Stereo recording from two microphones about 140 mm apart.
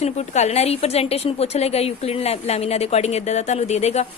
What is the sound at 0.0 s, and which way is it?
A woman's voice, 50° left (ahead or behind).